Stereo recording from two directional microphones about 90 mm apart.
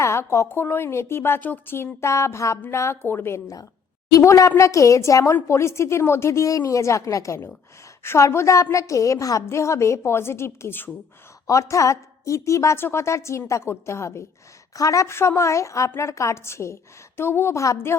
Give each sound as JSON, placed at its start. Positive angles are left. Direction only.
{"t": 0.0, "sound": "a woman's voice", "side_deg": 30}
{"t": 11.4, "sound": "a woman's voice", "side_deg": 35}